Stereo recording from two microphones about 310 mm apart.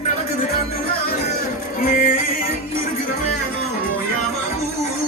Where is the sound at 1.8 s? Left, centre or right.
Left.